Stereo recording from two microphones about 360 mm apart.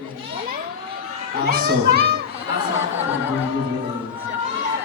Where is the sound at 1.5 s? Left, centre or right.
Right.